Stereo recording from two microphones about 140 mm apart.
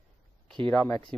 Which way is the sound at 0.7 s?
10° left (ahead or behind).